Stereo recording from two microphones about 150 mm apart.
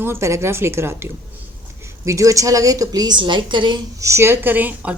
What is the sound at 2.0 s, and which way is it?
A woman's voice, 20° right (ahead or behind).